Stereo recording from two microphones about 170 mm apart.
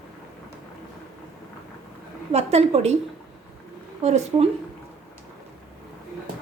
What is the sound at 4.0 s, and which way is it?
Speech, 40° right (ahead or behind).